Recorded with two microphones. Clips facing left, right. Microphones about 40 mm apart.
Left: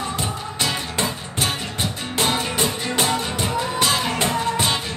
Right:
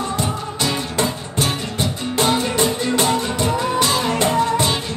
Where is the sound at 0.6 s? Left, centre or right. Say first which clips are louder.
Right 3 dB; centre.